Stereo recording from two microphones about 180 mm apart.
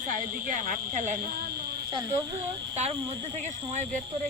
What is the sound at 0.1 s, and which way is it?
Speech, 50° right (ahead or behind).